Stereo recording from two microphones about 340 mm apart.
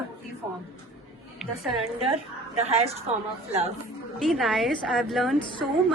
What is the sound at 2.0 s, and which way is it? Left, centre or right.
Speech, centre.